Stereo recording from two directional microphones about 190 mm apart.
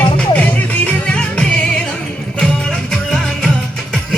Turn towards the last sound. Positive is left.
turn(degrees=5)  # may be behind; listen again after turning